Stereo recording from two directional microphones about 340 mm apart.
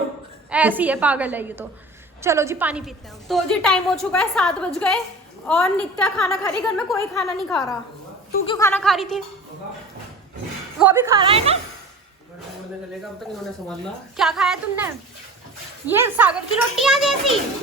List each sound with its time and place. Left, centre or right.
0.5 s a woman's voice: centre
10.8 s speech: centre
14.2 s a woman's voice: centre
15.9 s a woman's voice: centre